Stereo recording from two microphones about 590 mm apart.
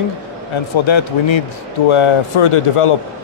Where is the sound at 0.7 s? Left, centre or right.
Left.